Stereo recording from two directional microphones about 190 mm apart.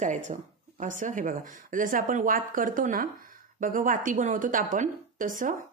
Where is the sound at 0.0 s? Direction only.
40° right (ahead or behind).